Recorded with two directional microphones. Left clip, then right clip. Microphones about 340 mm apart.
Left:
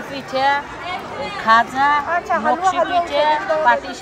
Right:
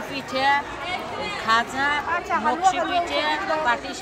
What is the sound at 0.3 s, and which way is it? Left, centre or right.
Speech, left.